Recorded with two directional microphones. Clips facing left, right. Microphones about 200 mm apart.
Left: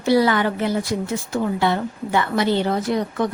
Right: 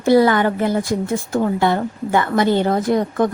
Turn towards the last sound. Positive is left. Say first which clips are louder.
# right 4 dB
turn(degrees=-50)  # may be behind; listen again after turning